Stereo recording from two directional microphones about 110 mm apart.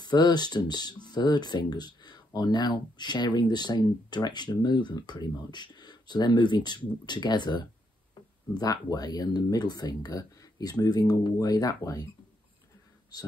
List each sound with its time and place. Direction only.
0.0 s speech: 40° left (ahead or behind)